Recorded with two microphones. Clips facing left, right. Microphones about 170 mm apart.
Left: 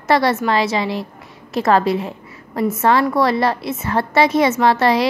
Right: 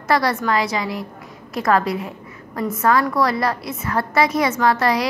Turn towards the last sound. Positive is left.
turn(degrees=25)  # may be behind; listen again after turning